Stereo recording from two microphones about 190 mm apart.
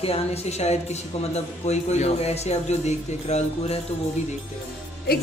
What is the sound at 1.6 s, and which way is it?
Speech, 35° left (ahead or behind).